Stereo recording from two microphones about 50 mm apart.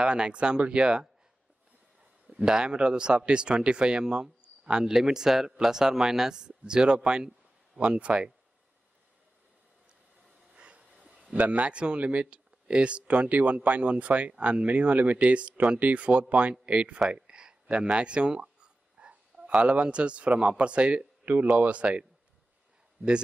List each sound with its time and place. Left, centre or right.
0.0 s speech: centre
2.2 s speech: centre
10.5 s a sound: right
11.3 s speech: right